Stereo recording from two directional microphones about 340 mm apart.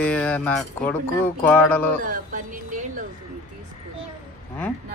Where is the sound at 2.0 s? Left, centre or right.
Right.